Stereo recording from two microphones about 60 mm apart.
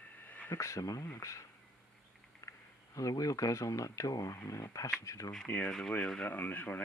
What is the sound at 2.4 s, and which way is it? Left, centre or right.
Speech, left.